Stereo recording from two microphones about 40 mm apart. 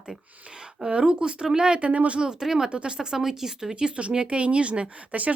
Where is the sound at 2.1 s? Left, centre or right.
Right.